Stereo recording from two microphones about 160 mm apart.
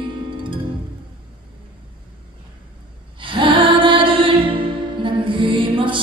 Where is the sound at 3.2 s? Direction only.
30° right (ahead or behind).